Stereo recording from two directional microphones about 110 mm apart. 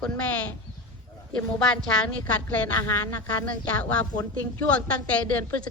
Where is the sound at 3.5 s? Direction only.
10° left (ahead or behind).